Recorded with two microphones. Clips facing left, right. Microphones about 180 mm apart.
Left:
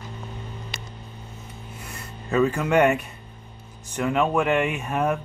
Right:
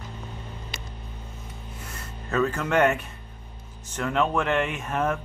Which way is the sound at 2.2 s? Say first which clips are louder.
Left 4 dB; 10° left (ahead or behind).